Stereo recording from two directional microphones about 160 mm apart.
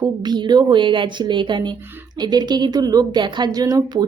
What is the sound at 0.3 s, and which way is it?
A woman's voice, 25° right (ahead or behind).